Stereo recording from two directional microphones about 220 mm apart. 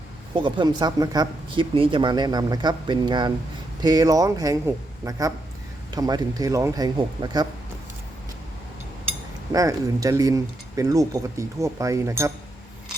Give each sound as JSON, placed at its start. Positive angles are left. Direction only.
{"t": 0.3, "sound": "speech", "side_deg": -20}
{"t": 9.5, "sound": "speech", "side_deg": -15}